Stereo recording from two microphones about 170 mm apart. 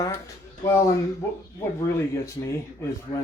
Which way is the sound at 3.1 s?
45° left (ahead or behind).